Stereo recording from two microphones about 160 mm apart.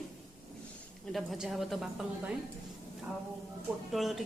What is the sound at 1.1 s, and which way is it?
Speech, centre (ahead or behind).